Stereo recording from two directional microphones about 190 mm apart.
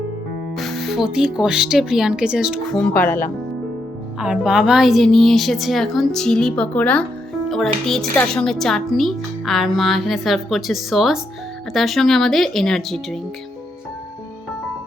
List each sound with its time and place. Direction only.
0.5 s a woman's voice: centre (ahead or behind)
4.2 s a woman's voice: 5° right (ahead or behind)